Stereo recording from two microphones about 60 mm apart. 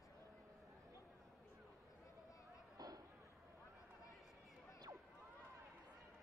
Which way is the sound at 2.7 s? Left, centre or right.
Right.